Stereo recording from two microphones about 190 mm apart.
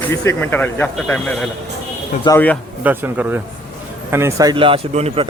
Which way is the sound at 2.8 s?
10° right (ahead or behind).